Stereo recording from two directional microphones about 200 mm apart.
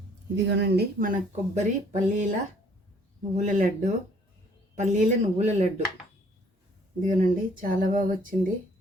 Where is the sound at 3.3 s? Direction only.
40° right (ahead or behind).